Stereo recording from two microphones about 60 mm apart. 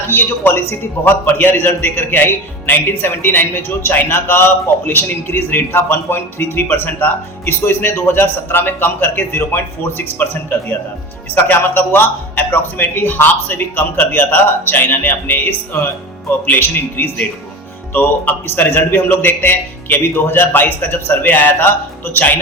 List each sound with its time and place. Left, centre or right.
0.1 s speech: left
2.8 s speech: left
11.3 s speech: left